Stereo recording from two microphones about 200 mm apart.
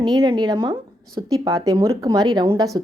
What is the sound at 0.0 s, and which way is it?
Speech, 20° right (ahead or behind).